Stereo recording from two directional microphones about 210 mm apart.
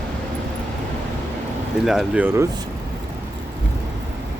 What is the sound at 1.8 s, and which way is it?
Speech, centre (ahead or behind).